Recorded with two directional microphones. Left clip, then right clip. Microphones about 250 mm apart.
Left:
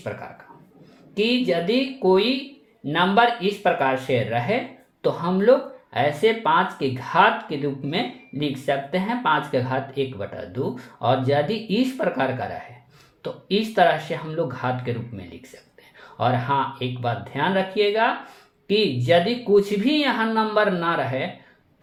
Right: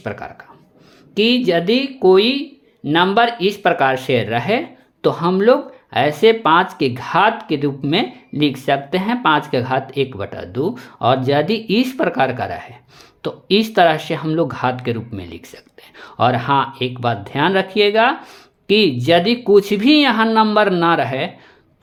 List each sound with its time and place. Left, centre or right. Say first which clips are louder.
1.1 s speech: right 6 dB; right